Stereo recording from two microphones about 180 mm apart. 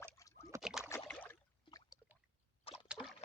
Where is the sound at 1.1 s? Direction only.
10° left (ahead or behind).